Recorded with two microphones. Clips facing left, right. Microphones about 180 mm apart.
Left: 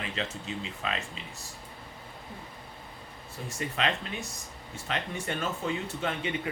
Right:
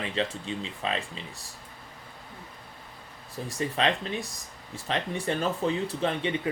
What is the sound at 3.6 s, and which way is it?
Speech, 35° right (ahead or behind).